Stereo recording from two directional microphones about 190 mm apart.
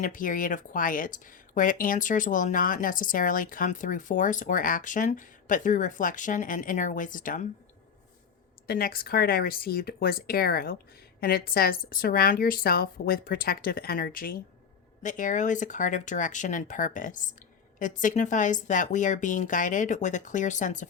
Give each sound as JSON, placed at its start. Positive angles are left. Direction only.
{"t": 0.0, "sound": "speech", "side_deg": 45}
{"t": 8.6, "sound": "speech", "side_deg": 55}